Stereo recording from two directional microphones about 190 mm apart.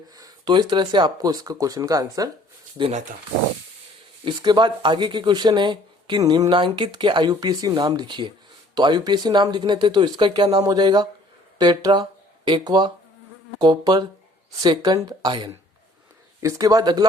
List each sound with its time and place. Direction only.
0.2 s speech: 20° right (ahead or behind)
4.3 s speech: 25° right (ahead or behind)